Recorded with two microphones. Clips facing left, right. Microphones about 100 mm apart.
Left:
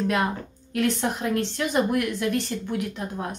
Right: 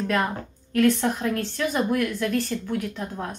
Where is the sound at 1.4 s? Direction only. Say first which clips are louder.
Left 1 dB; 20° left (ahead or behind).